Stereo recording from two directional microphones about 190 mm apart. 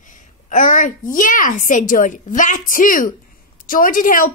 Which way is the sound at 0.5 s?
40° left (ahead or behind).